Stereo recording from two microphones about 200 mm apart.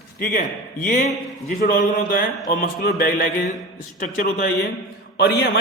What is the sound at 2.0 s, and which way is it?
Speech, 45° left (ahead or behind).